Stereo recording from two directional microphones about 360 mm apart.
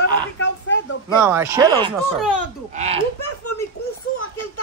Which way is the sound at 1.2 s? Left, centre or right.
Centre.